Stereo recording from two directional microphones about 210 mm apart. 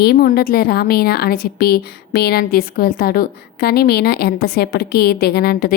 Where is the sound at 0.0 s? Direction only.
45° left (ahead or behind).